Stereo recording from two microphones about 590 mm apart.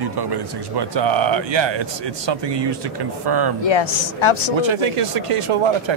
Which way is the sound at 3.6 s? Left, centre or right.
Left.